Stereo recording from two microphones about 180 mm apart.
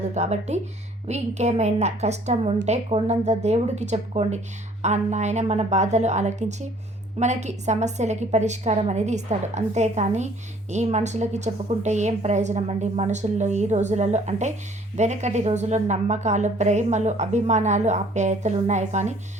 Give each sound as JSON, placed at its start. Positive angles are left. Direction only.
{"t": 0.1, "sound": "a woman's voice", "side_deg": -40}